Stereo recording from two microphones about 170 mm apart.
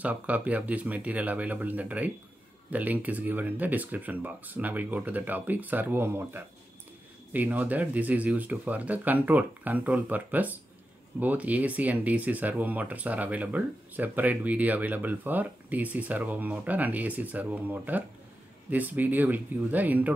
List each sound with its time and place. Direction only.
0.0 s speech: 10° right (ahead or behind)